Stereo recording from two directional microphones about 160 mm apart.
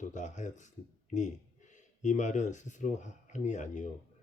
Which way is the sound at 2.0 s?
50° left (ahead or behind).